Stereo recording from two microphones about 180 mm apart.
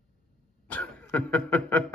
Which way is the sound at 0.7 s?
10° left (ahead or behind).